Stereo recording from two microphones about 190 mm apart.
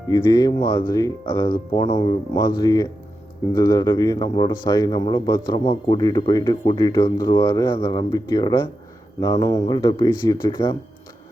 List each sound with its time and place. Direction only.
0.1 s speech: 20° left (ahead or behind)
5.5 s speech: 30° left (ahead or behind)
6.0 s speech: 20° left (ahead or behind)